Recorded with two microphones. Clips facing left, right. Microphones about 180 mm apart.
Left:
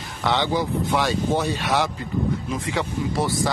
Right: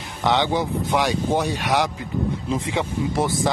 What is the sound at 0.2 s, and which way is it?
Speech, 15° right (ahead or behind).